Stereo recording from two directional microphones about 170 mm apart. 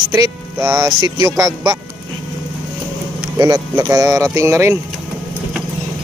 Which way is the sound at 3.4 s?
20° right (ahead or behind).